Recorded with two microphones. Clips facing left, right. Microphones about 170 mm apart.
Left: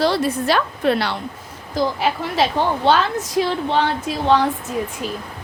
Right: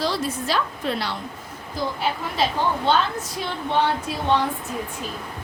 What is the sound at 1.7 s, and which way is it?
A woman's voice, 90° left.